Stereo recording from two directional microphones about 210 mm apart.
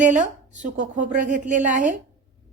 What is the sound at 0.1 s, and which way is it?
A woman's voice, 35° right (ahead or behind).